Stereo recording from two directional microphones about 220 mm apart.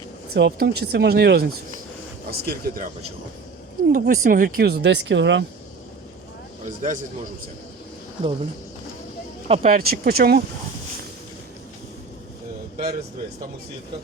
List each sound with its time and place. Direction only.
0.3 s speech: 50° right (ahead or behind)
3.9 s speech: 40° right (ahead or behind)
6.7 s speech: 35° right (ahead or behind)
9.5 s speech: 40° right (ahead or behind)
12.7 s a man's voice: 45° right (ahead or behind)